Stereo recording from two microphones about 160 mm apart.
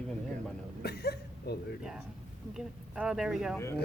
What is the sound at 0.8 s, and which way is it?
Speech, 85° left.